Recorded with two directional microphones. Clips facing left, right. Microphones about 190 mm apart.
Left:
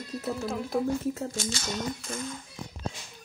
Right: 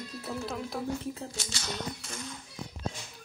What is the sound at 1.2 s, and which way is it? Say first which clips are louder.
Speech: left 7 dB; 50° left (ahead or behind).